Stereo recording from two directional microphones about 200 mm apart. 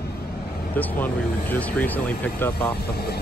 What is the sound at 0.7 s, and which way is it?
Speech, 10° left (ahead or behind).